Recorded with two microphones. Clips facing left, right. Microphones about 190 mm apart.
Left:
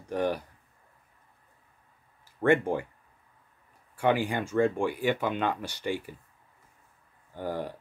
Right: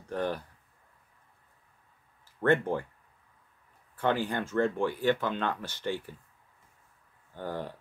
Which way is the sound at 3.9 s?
10° left (ahead or behind).